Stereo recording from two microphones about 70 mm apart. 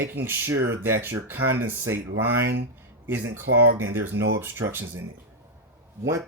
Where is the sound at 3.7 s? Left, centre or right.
Right.